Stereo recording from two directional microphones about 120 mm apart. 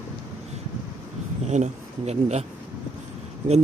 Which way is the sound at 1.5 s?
75° right (ahead or behind).